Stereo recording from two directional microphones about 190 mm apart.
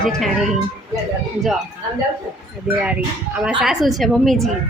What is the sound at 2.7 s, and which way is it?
A woman's voice, 5° right (ahead or behind).